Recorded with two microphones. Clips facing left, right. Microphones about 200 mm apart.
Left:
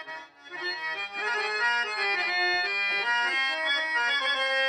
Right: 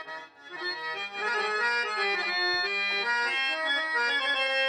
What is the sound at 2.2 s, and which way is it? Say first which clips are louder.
Bagpipes: left 1 dB; 20° left (ahead or behind).